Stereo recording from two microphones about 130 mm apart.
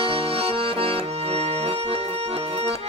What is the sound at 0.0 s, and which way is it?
Accordion, 45° right (ahead or behind).